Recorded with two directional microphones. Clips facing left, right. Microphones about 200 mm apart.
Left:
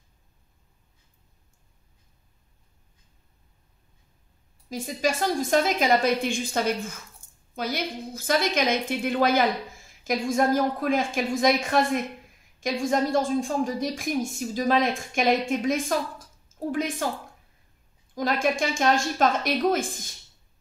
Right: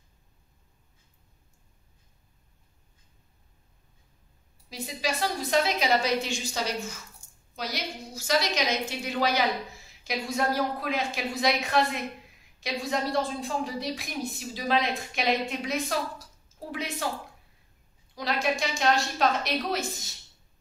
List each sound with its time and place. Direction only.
4.6 s a woman's voice: 45° left (ahead or behind)
18.1 s a woman's voice: 50° left (ahead or behind)